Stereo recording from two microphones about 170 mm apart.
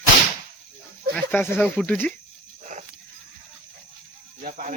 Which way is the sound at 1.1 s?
10° left (ahead or behind).